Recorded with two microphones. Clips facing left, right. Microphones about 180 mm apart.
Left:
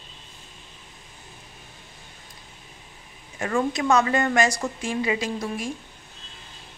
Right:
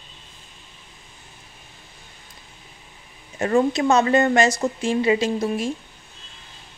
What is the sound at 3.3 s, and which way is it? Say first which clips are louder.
Speech: right 6 dB; 40° right (ahead or behind).